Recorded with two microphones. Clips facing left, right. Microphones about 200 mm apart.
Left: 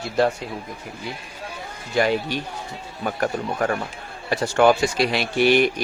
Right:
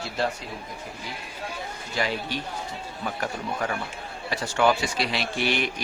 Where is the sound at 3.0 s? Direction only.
50° left (ahead or behind).